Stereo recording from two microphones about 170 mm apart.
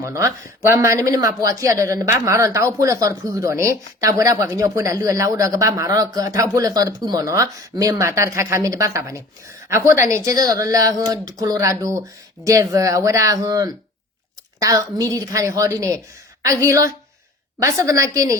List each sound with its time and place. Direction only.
0.0 s speech: 20° right (ahead or behind)